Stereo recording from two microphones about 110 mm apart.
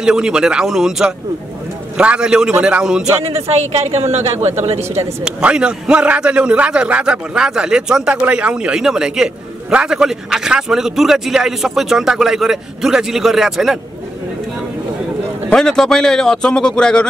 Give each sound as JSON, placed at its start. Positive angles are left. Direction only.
{"t": 0.0, "sound": "a man's voice", "side_deg": -5}
{"t": 3.7, "sound": "speech", "side_deg": -70}
{"t": 5.2, "sound": "a man's voice", "side_deg": -10}
{"t": 15.5, "sound": "a man's voice", "side_deg": 5}